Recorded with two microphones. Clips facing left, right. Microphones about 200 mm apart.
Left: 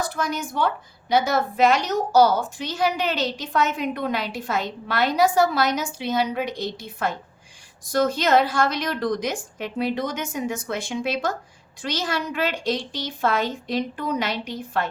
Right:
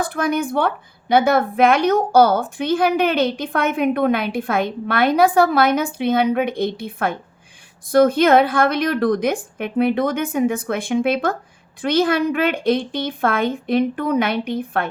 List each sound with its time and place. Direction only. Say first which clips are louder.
0.0 s a woman's voice: right 6 dB; 55° right (ahead or behind)